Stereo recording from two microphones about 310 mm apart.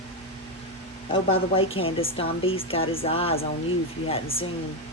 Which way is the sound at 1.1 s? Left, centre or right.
Centre.